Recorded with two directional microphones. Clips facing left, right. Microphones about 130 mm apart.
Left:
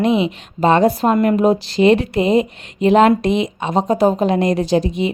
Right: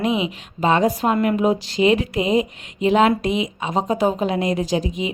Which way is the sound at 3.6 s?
35° left (ahead or behind).